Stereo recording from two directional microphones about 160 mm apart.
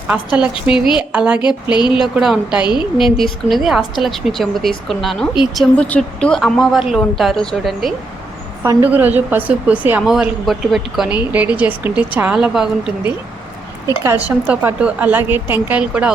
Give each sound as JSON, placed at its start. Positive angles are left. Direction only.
{"t": 0.1, "sound": "a woman's voice", "side_deg": -5}
{"t": 1.4, "sound": "speech", "side_deg": 30}
{"t": 1.9, "sound": "a woman's voice", "side_deg": -5}
{"t": 8.6, "sound": "a woman's voice", "side_deg": -10}
{"t": 14.3, "sound": "a woman's voice", "side_deg": -10}